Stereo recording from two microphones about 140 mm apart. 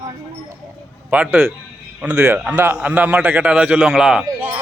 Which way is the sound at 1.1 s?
10° right (ahead or behind).